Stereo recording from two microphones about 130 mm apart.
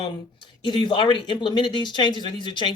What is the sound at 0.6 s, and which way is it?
A man's voice, 40° left (ahead or behind).